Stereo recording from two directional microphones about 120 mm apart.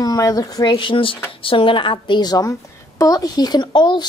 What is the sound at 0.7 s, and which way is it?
A woman's voice, 45° left (ahead or behind).